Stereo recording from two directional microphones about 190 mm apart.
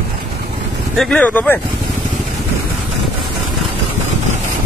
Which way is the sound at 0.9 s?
5° left (ahead or behind).